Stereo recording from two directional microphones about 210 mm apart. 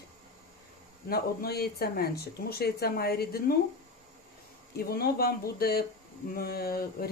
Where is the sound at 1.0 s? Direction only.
45° left (ahead or behind).